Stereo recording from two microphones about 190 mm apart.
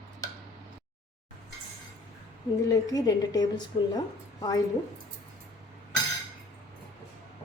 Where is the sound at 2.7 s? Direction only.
20° left (ahead or behind).